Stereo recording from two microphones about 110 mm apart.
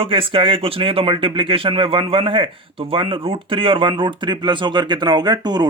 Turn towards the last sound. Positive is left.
turn(degrees=-40)  # may be behind; listen again after turning